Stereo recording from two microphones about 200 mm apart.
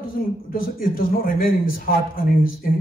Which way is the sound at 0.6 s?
45° left (ahead or behind).